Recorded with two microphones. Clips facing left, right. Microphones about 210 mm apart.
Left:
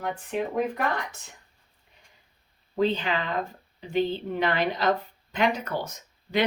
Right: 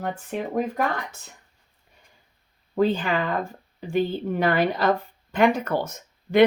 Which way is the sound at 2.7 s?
50° right (ahead or behind).